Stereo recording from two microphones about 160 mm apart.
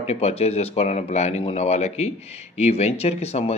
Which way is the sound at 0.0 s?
40° left (ahead or behind).